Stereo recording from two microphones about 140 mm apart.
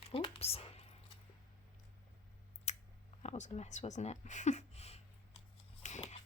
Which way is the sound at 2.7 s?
55° left (ahead or behind).